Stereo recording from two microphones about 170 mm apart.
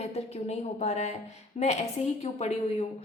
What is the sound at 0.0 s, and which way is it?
A woman's voice, 40° left (ahead or behind).